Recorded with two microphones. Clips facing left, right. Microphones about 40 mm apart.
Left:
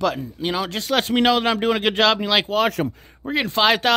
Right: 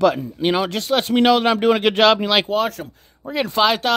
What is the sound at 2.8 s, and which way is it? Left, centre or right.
Speech, left.